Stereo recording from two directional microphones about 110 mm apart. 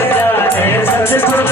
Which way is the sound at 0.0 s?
20° left (ahead or behind).